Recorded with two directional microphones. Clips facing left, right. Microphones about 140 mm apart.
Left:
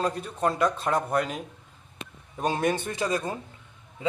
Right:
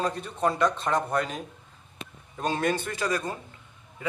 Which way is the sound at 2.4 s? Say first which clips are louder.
Left 1 dB; 10° left (ahead or behind).